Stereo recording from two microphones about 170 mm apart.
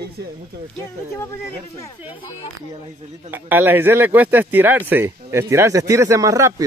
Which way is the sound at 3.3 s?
10° right (ahead or behind).